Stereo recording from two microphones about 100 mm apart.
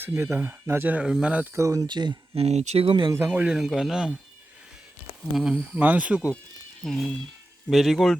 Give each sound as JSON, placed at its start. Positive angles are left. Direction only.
{"t": 0.0, "sound": "speech", "side_deg": -25}
{"t": 1.0, "sound": "speech", "side_deg": -10}
{"t": 1.5, "sound": "speech", "side_deg": -35}
{"t": 1.9, "sound": "speech", "side_deg": -50}
{"t": 2.3, "sound": "speech", "side_deg": -85}
{"t": 3.0, "sound": "speech", "side_deg": -30}
{"t": 3.2, "sound": "speech", "side_deg": -15}
{"t": 5.3, "sound": "speech", "side_deg": -5}
{"t": 6.8, "sound": "speech", "side_deg": 5}